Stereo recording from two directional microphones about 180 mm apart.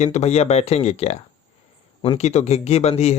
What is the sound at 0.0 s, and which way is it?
Speech, 40° left (ahead or behind).